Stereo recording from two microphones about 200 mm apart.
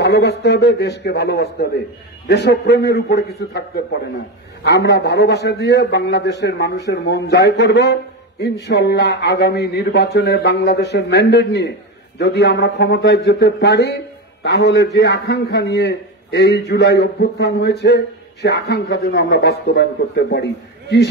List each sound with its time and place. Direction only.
0.0 s a man's voice: 55° left (ahead or behind)